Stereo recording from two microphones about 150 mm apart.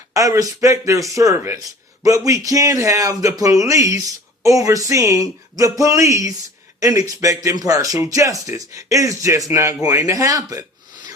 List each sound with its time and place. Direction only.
0.1 s a man's voice: 25° right (ahead or behind)